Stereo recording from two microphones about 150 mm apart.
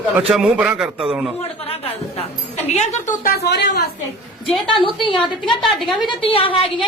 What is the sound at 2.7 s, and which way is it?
A woman's voice, 50° left (ahead or behind).